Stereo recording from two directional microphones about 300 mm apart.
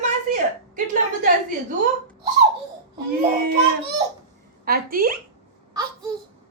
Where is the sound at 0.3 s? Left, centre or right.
Right.